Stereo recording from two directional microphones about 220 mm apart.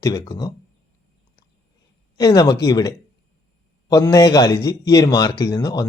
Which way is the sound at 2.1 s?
15° left (ahead or behind).